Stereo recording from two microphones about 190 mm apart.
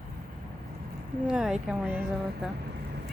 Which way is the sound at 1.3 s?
5° right (ahead or behind).